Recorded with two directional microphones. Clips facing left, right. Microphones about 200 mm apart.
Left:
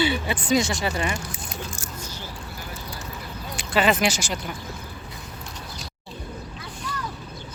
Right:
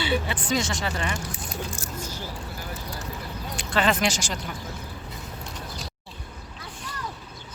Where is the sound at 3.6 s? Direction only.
5° left (ahead or behind).